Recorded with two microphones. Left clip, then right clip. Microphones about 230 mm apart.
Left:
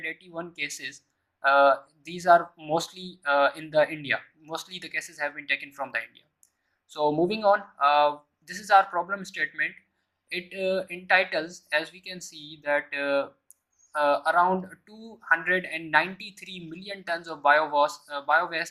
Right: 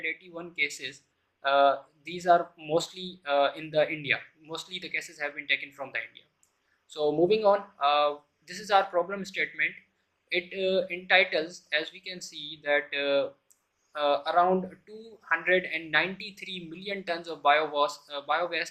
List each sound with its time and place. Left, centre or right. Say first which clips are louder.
0.0 s speech: even; left